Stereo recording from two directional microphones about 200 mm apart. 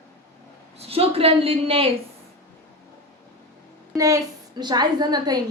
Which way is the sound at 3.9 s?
15° right (ahead or behind).